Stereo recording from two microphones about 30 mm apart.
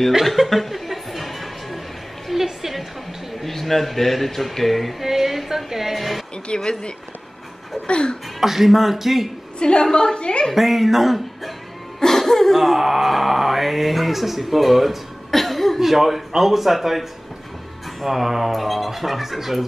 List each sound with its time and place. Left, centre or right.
0.2 s music: centre
2.3 s a sound: centre
3.3 s speech: centre
5.0 s a woman's voice: centre
6.5 s a woman's voice: left
8.4 s speech: centre
9.6 s a woman's voice: left
10.5 s speech: centre
12.0 s speech: centre
15.3 s cough: centre
15.8 s speech: centre
18.0 s speech: centre